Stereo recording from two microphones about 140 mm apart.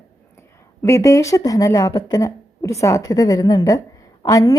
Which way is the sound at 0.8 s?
20° left (ahead or behind).